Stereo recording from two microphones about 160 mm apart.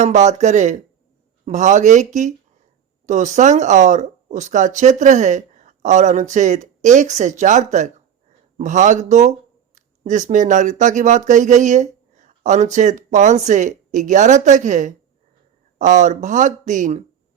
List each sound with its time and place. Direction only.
0.0 s speech: 45° right (ahead or behind)